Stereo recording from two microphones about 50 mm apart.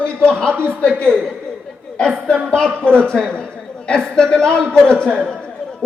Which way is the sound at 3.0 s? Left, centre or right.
Left.